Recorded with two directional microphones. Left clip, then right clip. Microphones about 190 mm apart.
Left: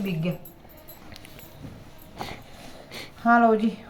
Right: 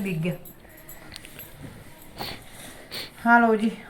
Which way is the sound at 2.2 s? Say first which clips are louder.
Right 1 dB; 10° left (ahead or behind).